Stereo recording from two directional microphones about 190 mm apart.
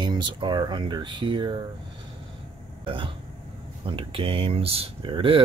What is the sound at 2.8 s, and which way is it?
Speech, 25° right (ahead or behind).